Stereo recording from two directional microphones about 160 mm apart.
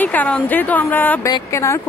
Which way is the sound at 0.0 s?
10° left (ahead or behind).